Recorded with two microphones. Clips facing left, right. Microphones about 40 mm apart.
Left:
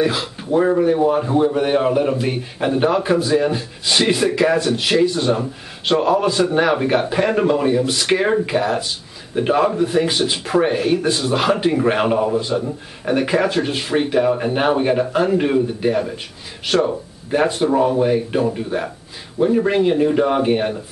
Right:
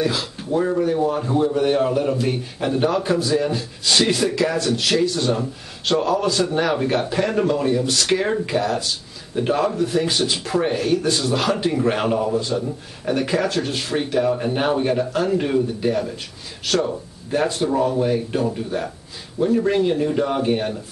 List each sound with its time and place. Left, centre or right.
0.0 s a man's voice: centre